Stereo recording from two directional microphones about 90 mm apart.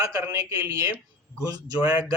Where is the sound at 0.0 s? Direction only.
35° right (ahead or behind).